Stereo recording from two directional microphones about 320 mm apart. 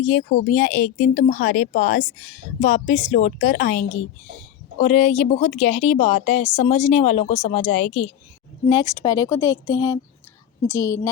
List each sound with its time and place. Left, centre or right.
0.0 s speech: left